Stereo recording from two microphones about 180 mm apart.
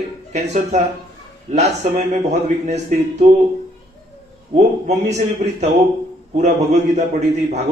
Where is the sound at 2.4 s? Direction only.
40° right (ahead or behind).